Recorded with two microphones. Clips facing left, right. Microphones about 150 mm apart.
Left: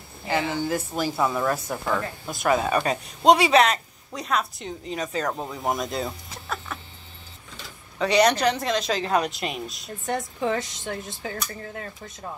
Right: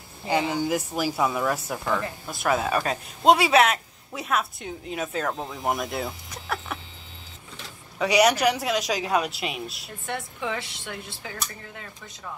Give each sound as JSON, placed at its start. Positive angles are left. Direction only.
{"t": 0.3, "sound": "speech", "side_deg": -15}
{"t": 8.0, "sound": "speech", "side_deg": -10}
{"t": 10.0, "sound": "speech", "side_deg": 35}